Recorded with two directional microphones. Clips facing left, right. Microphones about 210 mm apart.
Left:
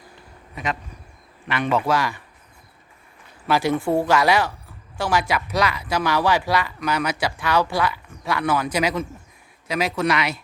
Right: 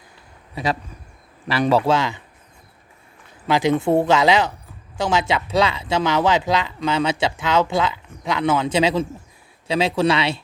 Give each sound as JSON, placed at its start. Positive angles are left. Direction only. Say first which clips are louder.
{"t": 0.5, "sound": "a man's voice", "louder": "right 4 dB", "side_deg": -35}
{"t": 2.0, "sound": "speech", "louder": "right 1 dB", "side_deg": -20}
{"t": 3.4, "sound": "speech", "louder": "right 2 dB", "side_deg": -20}